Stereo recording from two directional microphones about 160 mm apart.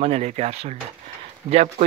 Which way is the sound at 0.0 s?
40° right (ahead or behind).